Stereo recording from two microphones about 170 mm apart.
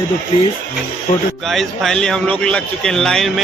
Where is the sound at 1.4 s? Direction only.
Centre (ahead or behind).